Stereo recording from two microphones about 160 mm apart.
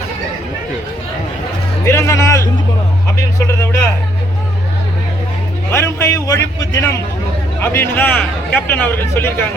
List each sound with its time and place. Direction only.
1.8 s a man's voice: 15° left (ahead or behind)
5.7 s a man's voice: 15° left (ahead or behind)